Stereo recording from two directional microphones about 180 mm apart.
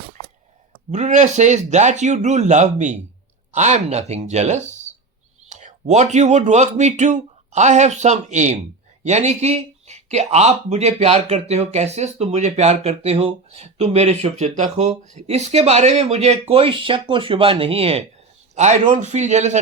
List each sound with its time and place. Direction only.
0.9 s speech: 40° right (ahead or behind)